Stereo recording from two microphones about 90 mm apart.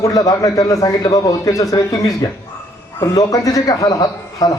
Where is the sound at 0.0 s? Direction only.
45° left (ahead or behind).